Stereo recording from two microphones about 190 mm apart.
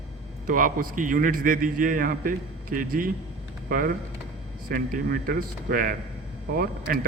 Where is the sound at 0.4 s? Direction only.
45° right (ahead or behind).